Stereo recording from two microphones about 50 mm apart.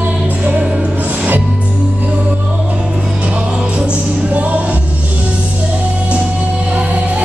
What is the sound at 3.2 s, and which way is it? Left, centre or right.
Music, right.